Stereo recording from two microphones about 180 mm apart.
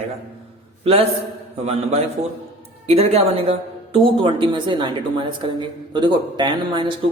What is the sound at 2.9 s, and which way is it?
A woman's voice, 35° right (ahead or behind).